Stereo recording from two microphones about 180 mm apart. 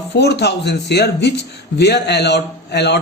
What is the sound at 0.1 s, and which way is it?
A man's voice, 70° left (ahead or behind).